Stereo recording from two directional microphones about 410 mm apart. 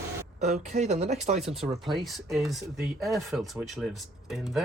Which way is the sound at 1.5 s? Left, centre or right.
Centre.